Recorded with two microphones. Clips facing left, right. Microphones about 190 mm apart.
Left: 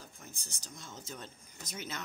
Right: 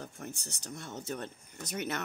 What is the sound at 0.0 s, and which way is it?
Speech, 65° right (ahead or behind).